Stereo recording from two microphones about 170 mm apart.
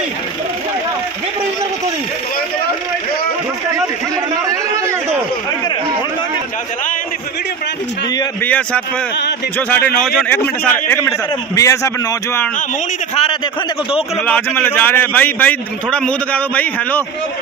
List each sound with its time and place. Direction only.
8.4 s a man's voice: 10° left (ahead or behind)
13.1 s a man's voice: 35° left (ahead or behind)
14.1 s a man's voice: 10° left (ahead or behind)